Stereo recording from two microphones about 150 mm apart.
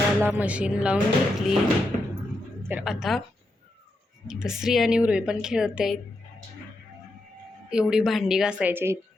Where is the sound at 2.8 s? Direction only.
Centre (ahead or behind).